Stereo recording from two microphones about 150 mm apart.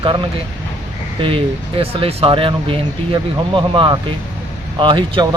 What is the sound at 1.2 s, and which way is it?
Speech, 35° right (ahead or behind).